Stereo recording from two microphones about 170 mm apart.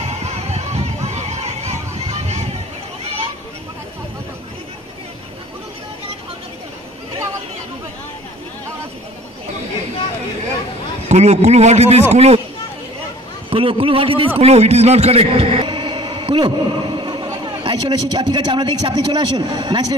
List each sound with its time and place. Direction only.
0.0 s a sound: 40° right (ahead or behind)
11.1 s a man's voice: 40° right (ahead or behind)
13.5 s a man's voice: 35° right (ahead or behind)